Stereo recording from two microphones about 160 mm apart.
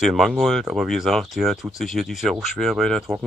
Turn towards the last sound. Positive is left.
turn(degrees=0)  # may be behind; listen again after turning